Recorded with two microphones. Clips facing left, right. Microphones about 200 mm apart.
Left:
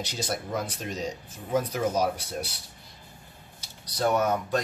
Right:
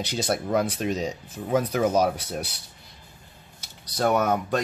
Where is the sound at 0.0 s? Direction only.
65° right (ahead or behind).